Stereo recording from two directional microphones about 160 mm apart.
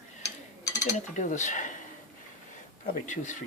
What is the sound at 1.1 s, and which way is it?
Cutlery, 50° left (ahead or behind).